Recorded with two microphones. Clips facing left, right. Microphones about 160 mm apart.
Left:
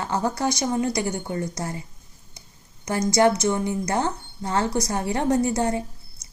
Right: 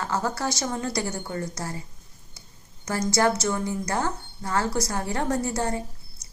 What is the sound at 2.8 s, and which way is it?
A woman's voice, 20° left (ahead or behind).